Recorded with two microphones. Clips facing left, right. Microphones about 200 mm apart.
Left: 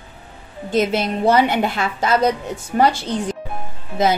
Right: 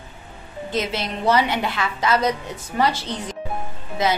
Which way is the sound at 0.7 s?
50° left (ahead or behind).